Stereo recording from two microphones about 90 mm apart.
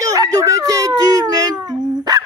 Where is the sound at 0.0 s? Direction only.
40° right (ahead or behind).